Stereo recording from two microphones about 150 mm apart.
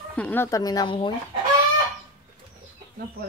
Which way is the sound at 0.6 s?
25° left (ahead or behind).